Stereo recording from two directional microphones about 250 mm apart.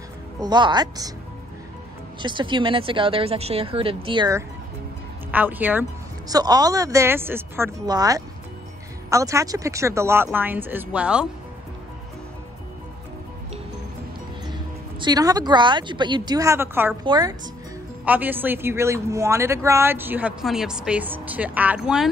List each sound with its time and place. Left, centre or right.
0.4 s a man's voice: centre
2.2 s a man's voice: centre
14.5 s a man's voice: centre